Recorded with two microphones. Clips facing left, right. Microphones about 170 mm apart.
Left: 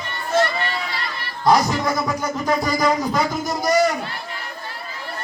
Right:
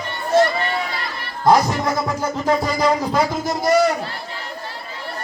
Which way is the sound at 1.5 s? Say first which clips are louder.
Right 2 dB; 25° right (ahead or behind).